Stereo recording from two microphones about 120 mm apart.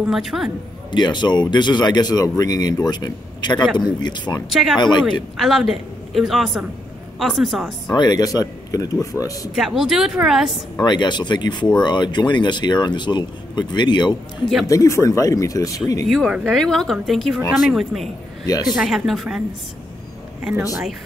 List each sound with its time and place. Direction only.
0.0 s speech: centre (ahead or behind)
0.9 s speech: 40° left (ahead or behind)
4.5 s speech: centre (ahead or behind)
4.7 s speech: 40° left (ahead or behind)
5.4 s speech: centre (ahead or behind)
7.9 s speech: 35° left (ahead or behind)
9.6 s speech: 5° right (ahead or behind)
10.8 s speech: 40° left (ahead or behind)
14.7 s speech: 25° left (ahead or behind)
16.1 s speech: centre (ahead or behind)